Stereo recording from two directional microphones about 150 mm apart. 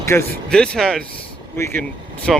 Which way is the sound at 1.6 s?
15° left (ahead or behind).